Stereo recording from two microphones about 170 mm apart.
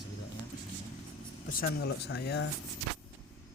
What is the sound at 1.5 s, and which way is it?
Speech, 70° left (ahead or behind).